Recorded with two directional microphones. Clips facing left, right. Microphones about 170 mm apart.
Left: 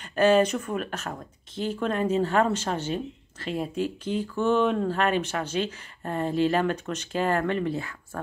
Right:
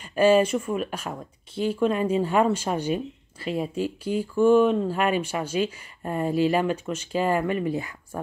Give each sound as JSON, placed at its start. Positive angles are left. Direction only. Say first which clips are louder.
{"t": 0.0, "sound": "speech", "louder": "right 1 dB", "side_deg": -10}